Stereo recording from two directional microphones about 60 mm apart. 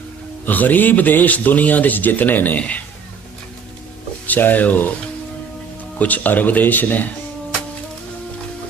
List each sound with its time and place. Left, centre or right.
0.4 s speech: left
4.3 s speech: left
6.0 s speech: left